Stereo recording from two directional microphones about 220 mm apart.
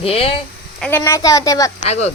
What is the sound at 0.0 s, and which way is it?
Speech, 25° left (ahead or behind).